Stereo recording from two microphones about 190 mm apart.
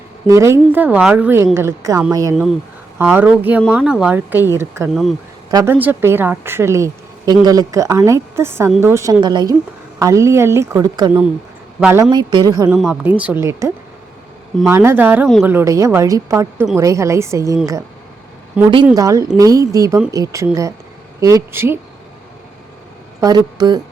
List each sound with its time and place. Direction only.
0.3 s speech: 15° right (ahead or behind)
2.3 s a woman's voice: centre (ahead or behind); by 11.1 s 20° right (ahead or behind)
11.8 s speech: 10° right (ahead or behind)
12.6 s speech: 5° right (ahead or behind)
18.9 s speech: 15° right (ahead or behind)
23.2 s speech: 20° right (ahead or behind)